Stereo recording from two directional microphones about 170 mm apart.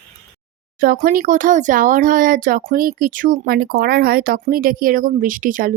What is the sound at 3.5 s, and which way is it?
Speech, 65° right (ahead or behind).